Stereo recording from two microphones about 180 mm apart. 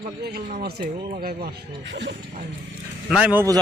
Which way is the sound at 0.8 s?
30° right (ahead or behind).